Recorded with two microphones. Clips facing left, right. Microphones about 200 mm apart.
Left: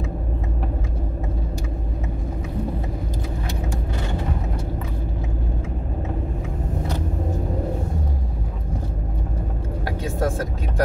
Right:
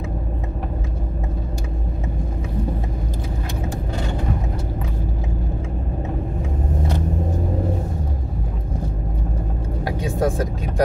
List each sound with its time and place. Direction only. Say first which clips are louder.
9.8 s vehicle: right 3 dB; 15° right (ahead or behind)